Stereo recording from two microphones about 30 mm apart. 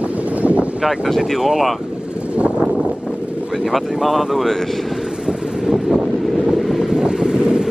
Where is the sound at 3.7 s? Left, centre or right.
Centre.